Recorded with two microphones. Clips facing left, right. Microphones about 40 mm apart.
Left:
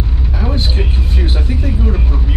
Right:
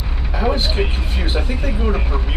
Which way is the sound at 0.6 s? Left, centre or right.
Centre.